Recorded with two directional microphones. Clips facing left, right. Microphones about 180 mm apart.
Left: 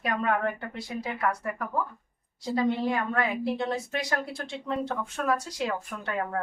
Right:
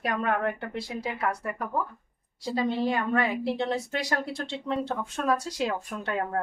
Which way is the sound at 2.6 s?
30° right (ahead or behind).